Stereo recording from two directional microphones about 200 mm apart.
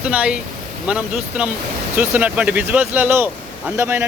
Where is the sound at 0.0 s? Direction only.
5° right (ahead or behind).